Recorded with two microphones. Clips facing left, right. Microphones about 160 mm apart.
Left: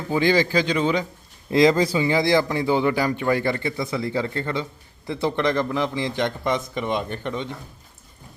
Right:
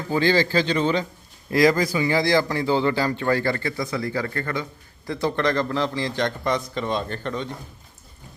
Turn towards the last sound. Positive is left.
turn(degrees=15)  # may be behind; listen again after turning